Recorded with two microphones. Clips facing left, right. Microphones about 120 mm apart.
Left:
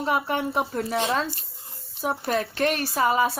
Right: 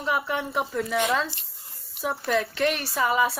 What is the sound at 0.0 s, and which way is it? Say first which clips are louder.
A woman's voice: left 2 dB; 45° left (ahead or behind).